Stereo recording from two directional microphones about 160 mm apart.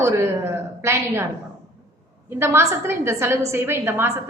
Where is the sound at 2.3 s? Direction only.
15° right (ahead or behind).